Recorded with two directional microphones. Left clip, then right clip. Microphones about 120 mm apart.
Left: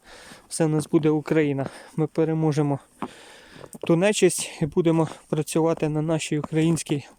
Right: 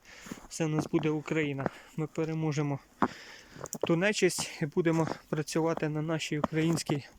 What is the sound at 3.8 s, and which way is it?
Speech, 35° left (ahead or behind).